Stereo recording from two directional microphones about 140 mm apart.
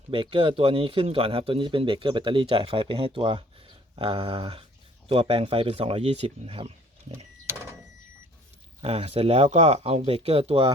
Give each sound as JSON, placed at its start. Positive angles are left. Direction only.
{"t": 0.1, "sound": "a man's voice", "side_deg": -40}
{"t": 8.8, "sound": "speech", "side_deg": -45}